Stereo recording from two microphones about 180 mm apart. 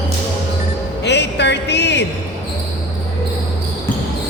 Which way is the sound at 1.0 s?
70° left (ahead or behind).